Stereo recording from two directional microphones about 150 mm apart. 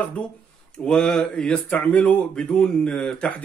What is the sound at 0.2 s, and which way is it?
Speech, 10° left (ahead or behind).